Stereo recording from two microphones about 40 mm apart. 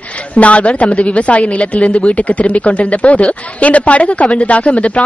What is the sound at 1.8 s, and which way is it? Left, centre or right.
Speech, centre.